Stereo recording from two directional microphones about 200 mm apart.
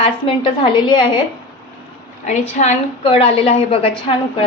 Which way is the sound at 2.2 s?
35° left (ahead or behind).